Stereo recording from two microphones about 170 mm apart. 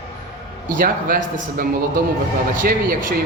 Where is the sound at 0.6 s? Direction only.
55° right (ahead or behind).